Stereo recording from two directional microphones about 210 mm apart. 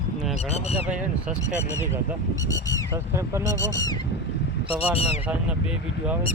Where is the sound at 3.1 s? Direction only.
15° right (ahead or behind).